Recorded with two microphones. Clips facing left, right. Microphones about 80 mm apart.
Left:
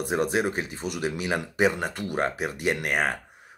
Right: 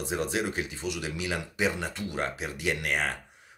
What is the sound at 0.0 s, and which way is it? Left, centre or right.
Speech, left.